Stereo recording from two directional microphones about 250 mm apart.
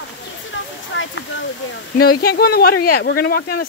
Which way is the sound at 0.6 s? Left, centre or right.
Left.